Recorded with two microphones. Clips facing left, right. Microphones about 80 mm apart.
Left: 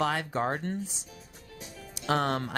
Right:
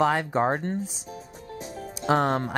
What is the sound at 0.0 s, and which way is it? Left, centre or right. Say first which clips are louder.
Speech: right 6 dB; right.